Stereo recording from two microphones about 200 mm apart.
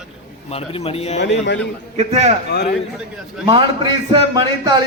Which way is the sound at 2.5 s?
55° left (ahead or behind).